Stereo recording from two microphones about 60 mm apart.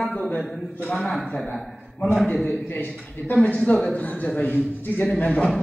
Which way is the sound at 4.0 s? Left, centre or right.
Left.